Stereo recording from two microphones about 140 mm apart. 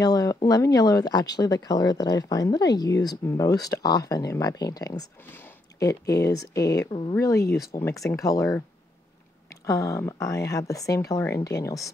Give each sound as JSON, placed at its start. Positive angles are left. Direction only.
{"t": 0.0, "sound": "speech", "side_deg": 25}
{"t": 6.9, "sound": "speech", "side_deg": 40}
{"t": 7.2, "sound": "speech", "side_deg": 20}